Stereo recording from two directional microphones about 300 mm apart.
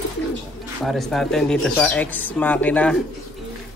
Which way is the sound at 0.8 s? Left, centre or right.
Centre.